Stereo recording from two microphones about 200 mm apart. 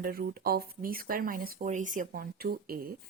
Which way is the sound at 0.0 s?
50° right (ahead or behind).